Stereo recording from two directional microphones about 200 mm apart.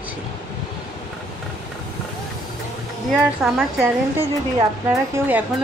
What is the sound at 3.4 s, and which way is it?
Speech, centre (ahead or behind).